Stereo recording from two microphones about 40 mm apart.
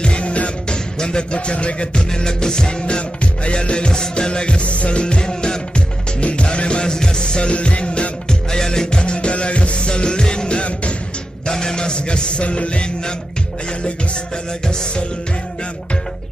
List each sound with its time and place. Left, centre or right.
0.0 s music: left
2.0 s music: centre
8.5 s music: centre
9.0 s music: left
11.4 s a man's voice: centre
14.7 s music: centre